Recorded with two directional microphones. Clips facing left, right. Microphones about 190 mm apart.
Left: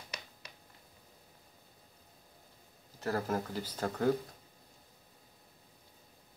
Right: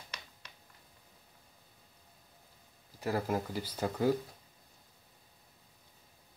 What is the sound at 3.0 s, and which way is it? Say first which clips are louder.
Speech: right 1 dB; 10° right (ahead or behind).